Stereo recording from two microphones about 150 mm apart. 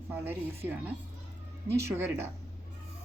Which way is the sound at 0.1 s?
15° right (ahead or behind).